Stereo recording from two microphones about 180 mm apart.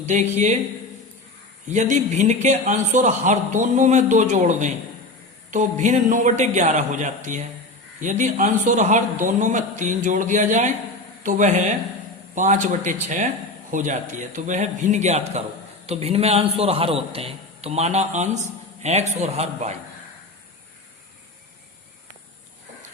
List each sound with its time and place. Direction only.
0.0 s a man's voice: 40° right (ahead or behind)
1.7 s a man's voice: 40° right (ahead or behind)